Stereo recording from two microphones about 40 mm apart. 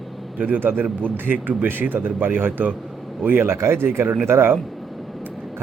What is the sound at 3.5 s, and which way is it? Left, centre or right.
Speech, right.